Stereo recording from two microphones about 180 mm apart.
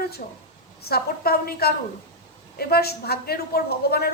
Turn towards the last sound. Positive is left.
turn(degrees=60)  # may be behind; listen again after turning